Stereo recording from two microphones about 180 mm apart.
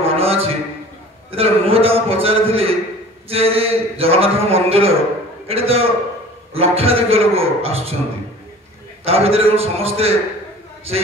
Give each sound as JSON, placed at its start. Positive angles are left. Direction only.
{"t": 0.0, "sound": "a sound", "side_deg": -30}
{"t": 1.3, "sound": "a man's voice", "side_deg": -30}
{"t": 9.0, "sound": "a man's voice", "side_deg": -35}